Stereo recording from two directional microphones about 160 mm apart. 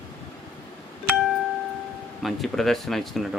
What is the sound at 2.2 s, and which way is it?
Speech, centre (ahead or behind).